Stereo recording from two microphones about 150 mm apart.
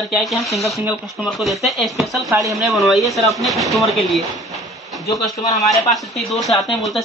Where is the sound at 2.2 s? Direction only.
20° right (ahead or behind).